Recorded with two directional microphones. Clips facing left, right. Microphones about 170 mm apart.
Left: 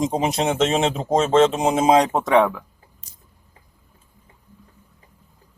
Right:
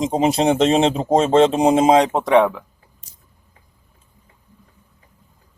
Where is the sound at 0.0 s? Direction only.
30° right (ahead or behind).